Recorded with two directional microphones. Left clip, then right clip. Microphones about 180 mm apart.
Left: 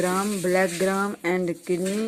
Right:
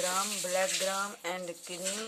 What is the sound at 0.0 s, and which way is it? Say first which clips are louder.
Speech: left 8 dB; 30° left (ahead or behind).